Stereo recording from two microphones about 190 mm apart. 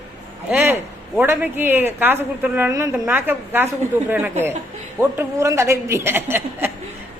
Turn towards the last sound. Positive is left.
turn(degrees=-10)  # may be behind; listen again after turning